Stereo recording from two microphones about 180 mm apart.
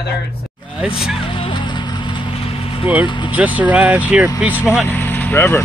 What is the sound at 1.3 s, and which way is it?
Vehicle, 25° left (ahead or behind).